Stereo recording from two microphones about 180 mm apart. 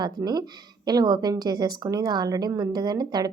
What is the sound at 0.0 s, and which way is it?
A woman's voice, 25° right (ahead or behind).